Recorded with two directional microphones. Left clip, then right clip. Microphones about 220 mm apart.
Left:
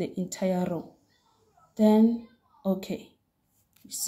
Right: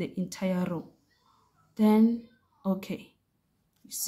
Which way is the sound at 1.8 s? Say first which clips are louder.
Left 2 dB; 15° right (ahead or behind).